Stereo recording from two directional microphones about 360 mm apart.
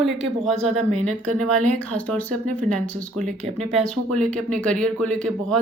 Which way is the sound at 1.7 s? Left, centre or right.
Centre.